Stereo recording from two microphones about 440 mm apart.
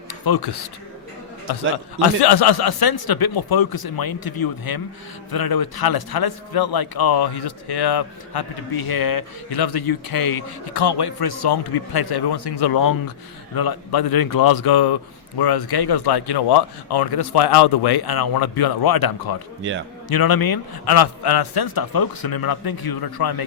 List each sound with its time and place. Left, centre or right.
0.1 s a man's voice: left